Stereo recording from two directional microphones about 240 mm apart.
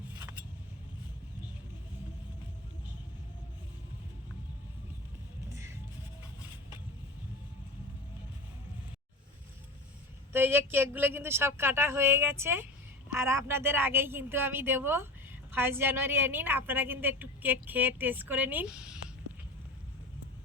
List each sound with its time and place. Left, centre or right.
10.3 s a woman's voice: centre